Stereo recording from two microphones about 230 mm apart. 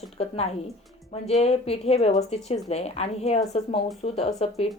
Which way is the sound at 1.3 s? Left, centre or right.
Left.